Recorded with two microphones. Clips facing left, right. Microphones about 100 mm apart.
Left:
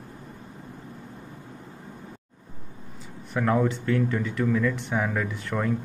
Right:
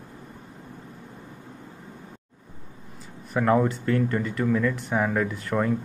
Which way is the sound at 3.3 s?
Centre (ahead or behind).